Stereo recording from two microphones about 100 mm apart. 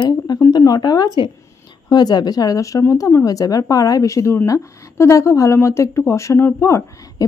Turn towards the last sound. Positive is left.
turn(degrees=30)  # may be behind; listen again after turning